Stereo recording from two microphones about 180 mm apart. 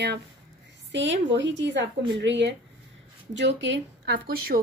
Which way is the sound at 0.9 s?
90° right.